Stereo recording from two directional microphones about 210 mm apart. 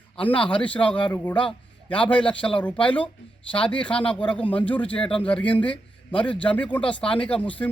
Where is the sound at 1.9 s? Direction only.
5° left (ahead or behind).